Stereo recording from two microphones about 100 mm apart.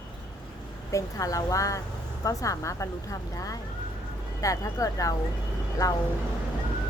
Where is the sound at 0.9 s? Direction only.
35° left (ahead or behind).